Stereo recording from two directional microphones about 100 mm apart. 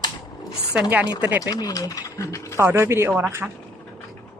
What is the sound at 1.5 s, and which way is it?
Speech, 40° left (ahead or behind).